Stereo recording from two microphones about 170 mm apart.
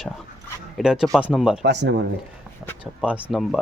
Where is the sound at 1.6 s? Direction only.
90° right.